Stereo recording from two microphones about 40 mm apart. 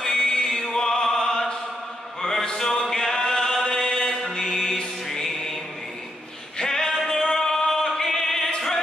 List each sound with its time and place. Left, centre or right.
0.0 s music: centre
0.6 s opera: centre
2.2 s chant: centre
4.2 s music: centre
6.6 s male singing: centre
7.1 s a sound: left
7.3 s music: centre